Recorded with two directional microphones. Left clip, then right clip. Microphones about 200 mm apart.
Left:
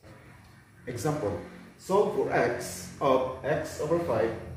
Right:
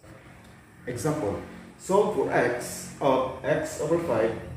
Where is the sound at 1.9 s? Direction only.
15° left (ahead or behind).